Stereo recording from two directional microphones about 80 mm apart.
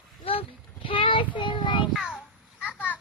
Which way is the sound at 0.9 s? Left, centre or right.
Left.